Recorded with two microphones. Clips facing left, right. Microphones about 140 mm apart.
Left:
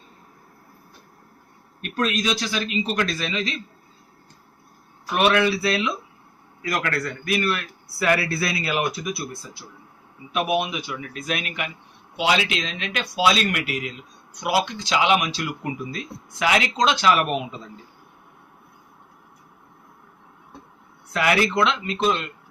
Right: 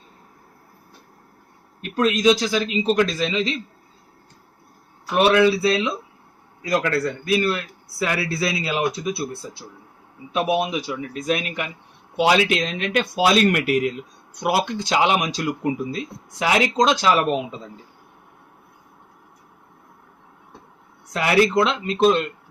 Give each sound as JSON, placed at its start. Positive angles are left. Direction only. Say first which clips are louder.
{"t": 1.8, "sound": "speech", "louder": "right 6 dB", "side_deg": -20}
{"t": 5.1, "sound": "speech", "louder": "right 4 dB", "side_deg": -30}
{"t": 12.1, "sound": "speech", "louder": "right 5 dB", "side_deg": -50}
{"t": 21.1, "sound": "speech", "louder": "right 3 dB", "side_deg": -30}